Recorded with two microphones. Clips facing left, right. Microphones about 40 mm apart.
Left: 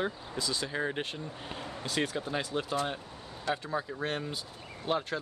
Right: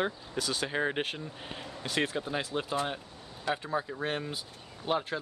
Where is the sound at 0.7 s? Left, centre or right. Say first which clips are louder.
Right 2 dB; right.